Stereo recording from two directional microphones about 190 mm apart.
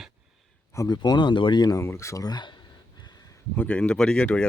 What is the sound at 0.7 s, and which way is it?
Speech, 20° left (ahead or behind).